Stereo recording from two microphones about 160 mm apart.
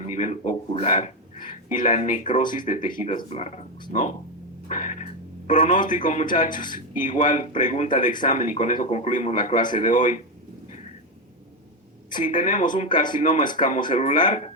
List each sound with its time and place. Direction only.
0.0 s a man's voice: 50° left (ahead or behind)
3.2 s a man's voice: 45° left (ahead or behind)
4.7 s a sound: 55° left (ahead or behind)
5.6 s a man's voice: 55° left (ahead or behind)
12.1 s a man's voice: 55° left (ahead or behind)